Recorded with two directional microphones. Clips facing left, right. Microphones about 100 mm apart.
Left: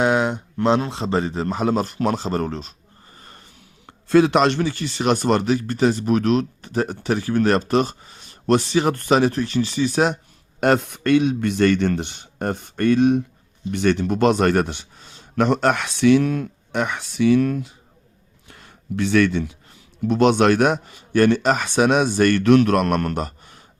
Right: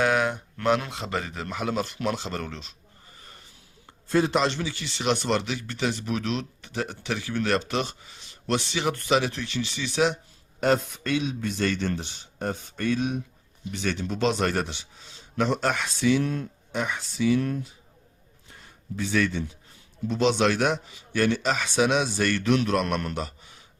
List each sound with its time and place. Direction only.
0.0 s speech: 25° left (ahead or behind); by 2.7 s 40° left (ahead or behind)
4.1 s speech: 80° left; by 10.2 s 45° left (ahead or behind)
10.6 s a man's voice: 65° left (ahead or behind); by 17.7 s 90° left
18.4 s a sound: 75° left (ahead or behind)
20.1 s speech: 55° left (ahead or behind)